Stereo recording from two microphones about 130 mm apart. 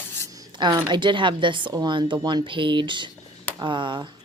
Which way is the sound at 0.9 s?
35° right (ahead or behind).